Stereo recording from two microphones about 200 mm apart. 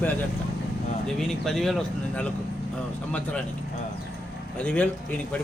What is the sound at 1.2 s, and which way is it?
Speech, centre (ahead or behind).